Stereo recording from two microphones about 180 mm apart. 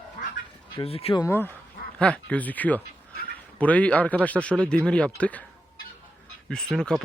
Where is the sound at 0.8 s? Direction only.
35° left (ahead or behind).